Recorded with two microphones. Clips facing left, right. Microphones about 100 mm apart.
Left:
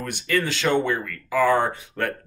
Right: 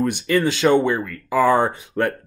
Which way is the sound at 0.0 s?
20° right (ahead or behind).